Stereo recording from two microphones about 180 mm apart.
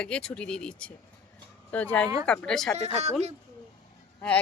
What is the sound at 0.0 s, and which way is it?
Speech, 5° left (ahead or behind).